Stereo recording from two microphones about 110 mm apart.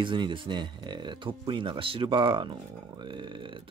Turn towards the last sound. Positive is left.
turn(degrees=-50)  # may be behind; listen again after turning